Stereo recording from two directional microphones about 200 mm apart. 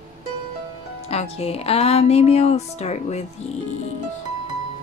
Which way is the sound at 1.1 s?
30° left (ahead or behind).